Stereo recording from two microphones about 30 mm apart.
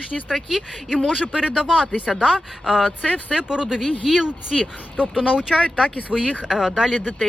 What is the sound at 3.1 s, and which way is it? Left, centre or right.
Speech, right.